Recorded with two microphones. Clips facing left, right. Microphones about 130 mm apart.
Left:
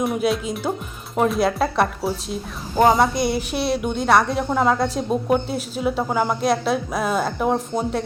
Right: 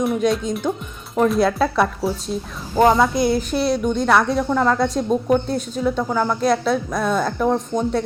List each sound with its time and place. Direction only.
0.0 s a woman's voice: centre (ahead or behind)